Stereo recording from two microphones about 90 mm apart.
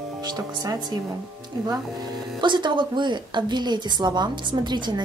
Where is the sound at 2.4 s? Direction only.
60° right (ahead or behind).